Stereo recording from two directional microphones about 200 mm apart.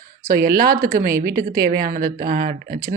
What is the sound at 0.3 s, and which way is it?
Speech, 45° right (ahead or behind).